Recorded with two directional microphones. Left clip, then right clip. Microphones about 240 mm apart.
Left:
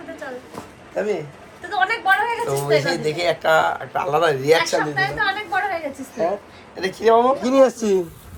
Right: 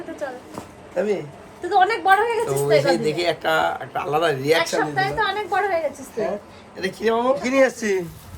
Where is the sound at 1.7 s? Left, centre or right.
Right.